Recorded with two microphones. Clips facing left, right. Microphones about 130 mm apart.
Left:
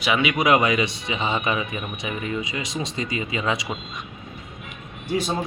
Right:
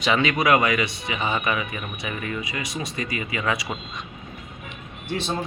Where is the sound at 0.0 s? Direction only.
10° left (ahead or behind).